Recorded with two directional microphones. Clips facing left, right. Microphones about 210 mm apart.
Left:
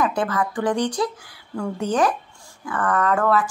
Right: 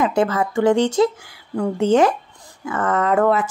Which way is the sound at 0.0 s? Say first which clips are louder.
Right 4 dB; 25° right (ahead or behind).